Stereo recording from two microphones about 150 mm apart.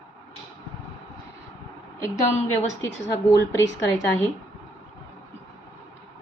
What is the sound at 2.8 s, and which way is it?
Speech, 20° left (ahead or behind).